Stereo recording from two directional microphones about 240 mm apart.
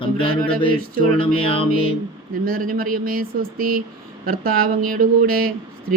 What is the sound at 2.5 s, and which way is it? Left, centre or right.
Speech, right.